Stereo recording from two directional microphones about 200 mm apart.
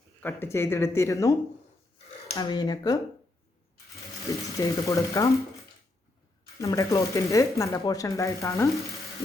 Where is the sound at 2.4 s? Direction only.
20° left (ahead or behind).